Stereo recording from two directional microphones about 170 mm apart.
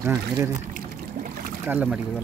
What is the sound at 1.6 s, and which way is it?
Speech, 10° right (ahead or behind).